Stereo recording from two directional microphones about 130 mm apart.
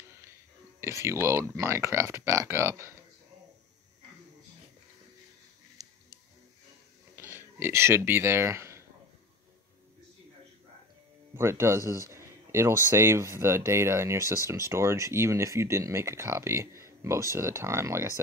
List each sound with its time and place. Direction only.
0.7 s speech: 20° right (ahead or behind)
7.2 s speech: 15° right (ahead or behind)
11.3 s speech: 20° right (ahead or behind)